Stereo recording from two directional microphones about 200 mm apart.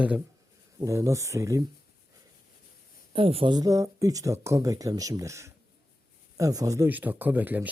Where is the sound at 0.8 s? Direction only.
15° right (ahead or behind).